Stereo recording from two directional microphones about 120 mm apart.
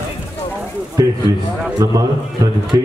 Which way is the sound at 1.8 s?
30° right (ahead or behind).